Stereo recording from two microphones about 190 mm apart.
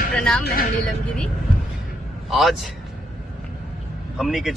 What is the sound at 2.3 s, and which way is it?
Speech, centre (ahead or behind).